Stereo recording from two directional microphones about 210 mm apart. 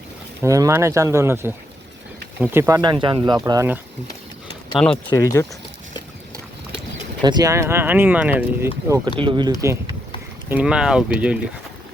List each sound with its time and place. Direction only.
0.4 s speech: 15° right (ahead or behind)
4.8 s speech: 5° left (ahead or behind)
5.2 s speech: 15° left (ahead or behind)
7.2 s speech: 20° right (ahead or behind)
9.1 s speech: 25° right (ahead or behind)
10.5 s speech: 5° right (ahead or behind)